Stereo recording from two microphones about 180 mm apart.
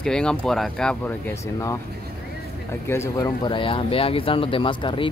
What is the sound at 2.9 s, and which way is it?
Speech, 20° left (ahead or behind).